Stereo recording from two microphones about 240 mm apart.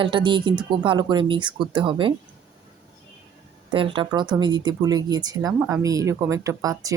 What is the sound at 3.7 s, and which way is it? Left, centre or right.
Speech, right.